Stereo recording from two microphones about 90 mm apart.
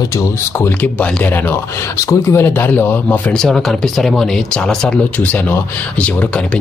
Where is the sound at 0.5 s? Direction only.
20° left (ahead or behind).